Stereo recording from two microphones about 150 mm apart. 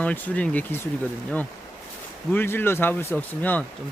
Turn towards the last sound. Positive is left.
turn(degrees=10)  # may be behind; listen again after turning